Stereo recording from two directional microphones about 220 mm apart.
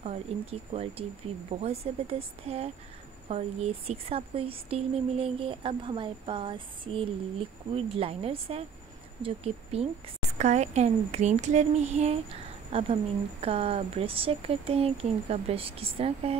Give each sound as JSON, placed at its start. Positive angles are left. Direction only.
{"t": 0.0, "sound": "a child's voice", "side_deg": -30}